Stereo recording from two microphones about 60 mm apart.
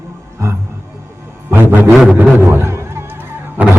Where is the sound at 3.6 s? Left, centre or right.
Right.